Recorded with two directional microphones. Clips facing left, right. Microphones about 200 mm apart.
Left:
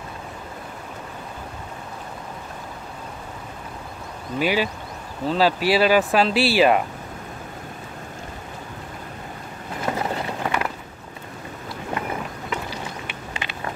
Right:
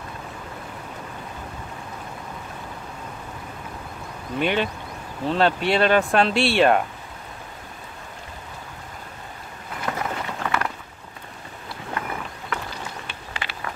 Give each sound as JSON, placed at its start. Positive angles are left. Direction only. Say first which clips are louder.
{"t": 4.4, "sound": "speech", "louder": "left 1 dB", "side_deg": 5}
{"t": 9.8, "sound": "run", "louder": "left 3 dB", "side_deg": 25}
{"t": 13.0, "sound": "a sound", "louder": "left 2 dB", "side_deg": 20}